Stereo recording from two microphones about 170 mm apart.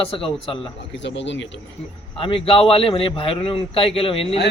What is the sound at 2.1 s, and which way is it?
Speech, 30° left (ahead or behind).